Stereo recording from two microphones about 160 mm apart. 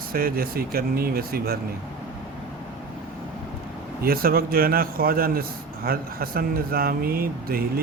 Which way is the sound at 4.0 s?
70° right (ahead or behind).